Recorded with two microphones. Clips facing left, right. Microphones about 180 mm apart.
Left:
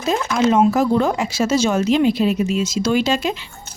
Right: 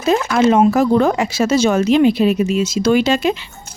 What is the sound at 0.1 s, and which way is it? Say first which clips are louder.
Speech: right 4 dB; 65° right (ahead or behind).